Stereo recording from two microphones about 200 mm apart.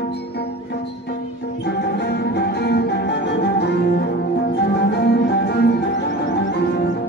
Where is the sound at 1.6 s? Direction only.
55° left (ahead or behind).